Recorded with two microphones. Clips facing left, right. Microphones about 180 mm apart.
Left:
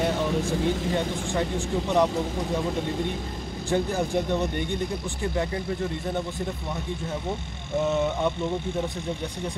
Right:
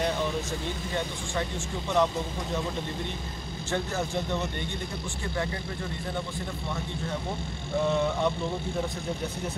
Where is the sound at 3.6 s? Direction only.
15° left (ahead or behind).